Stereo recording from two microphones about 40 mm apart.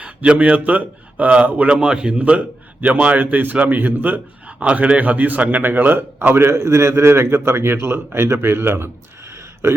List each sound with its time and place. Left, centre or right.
0.0 s a man's voice: right
2.1 s a man's voice: right
4.6 s speech: right
5.6 s speech: right
6.3 s a man's voice: right